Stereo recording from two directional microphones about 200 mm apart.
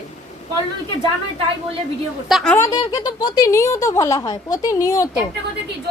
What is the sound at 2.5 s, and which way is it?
Speech, 15° left (ahead or behind).